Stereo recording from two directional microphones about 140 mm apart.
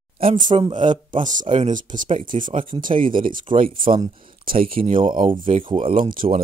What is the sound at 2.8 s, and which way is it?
Speech, 75° right (ahead or behind).